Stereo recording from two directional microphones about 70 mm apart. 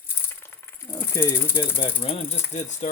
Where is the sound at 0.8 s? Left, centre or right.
Left.